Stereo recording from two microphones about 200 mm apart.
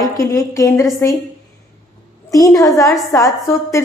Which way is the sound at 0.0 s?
15° left (ahead or behind).